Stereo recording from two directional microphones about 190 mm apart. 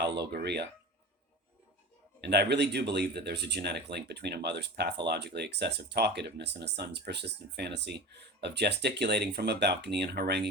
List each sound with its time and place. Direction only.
0.0 s speech: 60° right (ahead or behind)
2.2 s speech: 60° right (ahead or behind)